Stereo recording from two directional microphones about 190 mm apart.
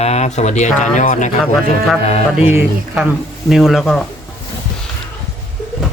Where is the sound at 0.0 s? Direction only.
35° left (ahead or behind).